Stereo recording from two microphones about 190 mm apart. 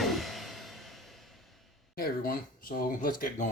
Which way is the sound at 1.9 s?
50° left (ahead or behind).